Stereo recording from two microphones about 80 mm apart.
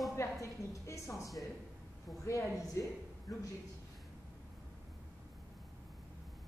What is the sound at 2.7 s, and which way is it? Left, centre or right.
Speech, left.